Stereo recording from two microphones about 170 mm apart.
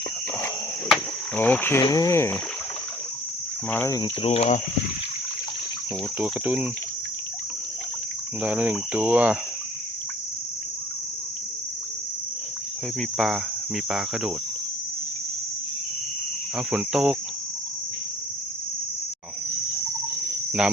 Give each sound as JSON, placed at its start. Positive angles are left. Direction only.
{"t": 1.4, "sound": "cricket", "side_deg": 10}
{"t": 1.8, "sound": "cricket", "side_deg": 20}
{"t": 3.7, "sound": "cricket", "side_deg": 15}
{"t": 4.0, "sound": "cricket", "side_deg": 35}
{"t": 6.1, "sound": "cricket", "side_deg": -10}
{"t": 8.4, "sound": "cricket", "side_deg": -10}
{"t": 13.0, "sound": "cricket", "side_deg": 0}
{"t": 16.6, "sound": "cricket", "side_deg": -5}